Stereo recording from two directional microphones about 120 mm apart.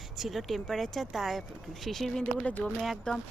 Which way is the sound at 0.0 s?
Centre (ahead or behind).